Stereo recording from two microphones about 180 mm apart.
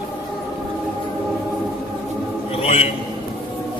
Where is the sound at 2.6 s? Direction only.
35° left (ahead or behind).